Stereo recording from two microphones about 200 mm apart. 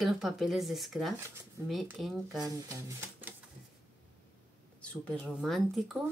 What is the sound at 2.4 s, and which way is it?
Speech, 15° right (ahead or behind).